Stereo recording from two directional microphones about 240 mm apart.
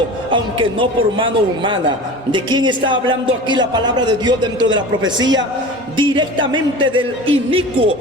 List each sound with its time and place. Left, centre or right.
0.3 s speech: right